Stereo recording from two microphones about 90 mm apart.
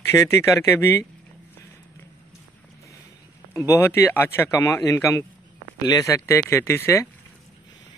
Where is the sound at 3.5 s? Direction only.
30° left (ahead or behind).